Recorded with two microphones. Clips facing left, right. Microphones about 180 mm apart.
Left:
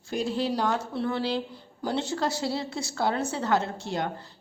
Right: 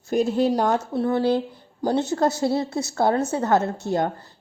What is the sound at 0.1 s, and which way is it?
A woman's voice, 45° right (ahead or behind).